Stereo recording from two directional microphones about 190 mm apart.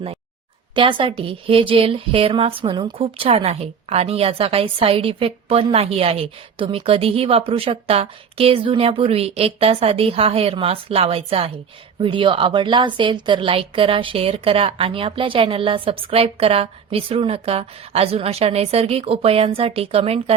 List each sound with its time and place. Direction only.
0.8 s a woman's voice: 25° right (ahead or behind)